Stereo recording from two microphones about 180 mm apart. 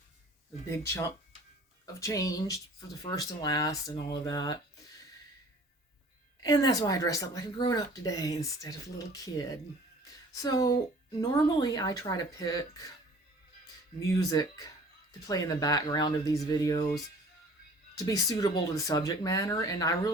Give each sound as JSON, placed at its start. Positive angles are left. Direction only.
{"t": 0.7, "sound": "speech", "side_deg": 15}
{"t": 6.4, "sound": "speech", "side_deg": 20}
{"t": 10.0, "sound": "a sound", "side_deg": 20}
{"t": 11.2, "sound": "speech", "side_deg": 20}
{"t": 14.1, "sound": "speech", "side_deg": 20}
{"t": 17.9, "sound": "speech", "side_deg": 20}